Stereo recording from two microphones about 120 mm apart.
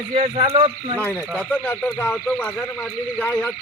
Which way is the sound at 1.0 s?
10° left (ahead or behind).